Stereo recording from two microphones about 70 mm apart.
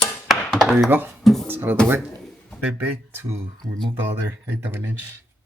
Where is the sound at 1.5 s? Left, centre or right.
Right.